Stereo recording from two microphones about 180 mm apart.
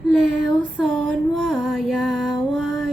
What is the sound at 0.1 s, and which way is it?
Child singing, centre (ahead or behind).